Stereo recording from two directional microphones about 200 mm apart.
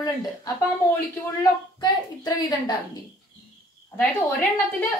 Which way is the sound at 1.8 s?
20° left (ahead or behind).